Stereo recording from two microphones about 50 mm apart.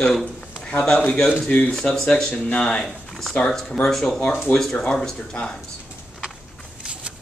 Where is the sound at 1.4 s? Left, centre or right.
Left.